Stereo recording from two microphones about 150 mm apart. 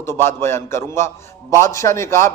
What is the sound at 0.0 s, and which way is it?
A man's voice, 15° left (ahead or behind).